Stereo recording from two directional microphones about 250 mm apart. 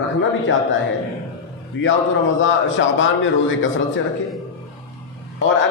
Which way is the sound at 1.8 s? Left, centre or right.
Left.